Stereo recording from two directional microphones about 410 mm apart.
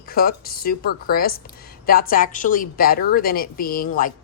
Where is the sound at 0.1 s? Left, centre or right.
Left.